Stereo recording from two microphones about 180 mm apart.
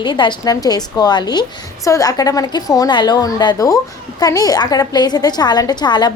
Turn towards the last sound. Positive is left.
turn(degrees=25)  # may be behind; listen again after turning